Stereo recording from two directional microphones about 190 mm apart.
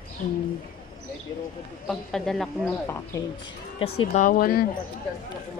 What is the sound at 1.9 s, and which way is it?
Speech, centre (ahead or behind).